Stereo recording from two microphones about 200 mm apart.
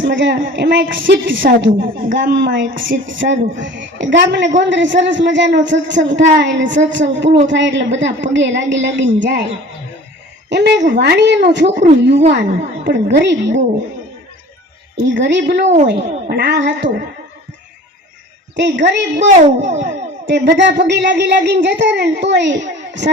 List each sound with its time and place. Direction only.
0.1 s a woman's voice: 65° right (ahead or behind)
10.5 s a woman's voice: 60° right (ahead or behind)
15.0 s a woman's voice: 65° right (ahead or behind)
18.5 s a woman's voice: 60° right (ahead or behind)
19.6 s music: 35° right (ahead or behind)
20.2 s a woman's voice: 60° right (ahead or behind)